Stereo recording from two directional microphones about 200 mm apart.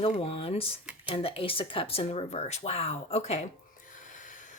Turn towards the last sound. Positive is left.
turn(degrees=40)  # may be behind; listen again after turning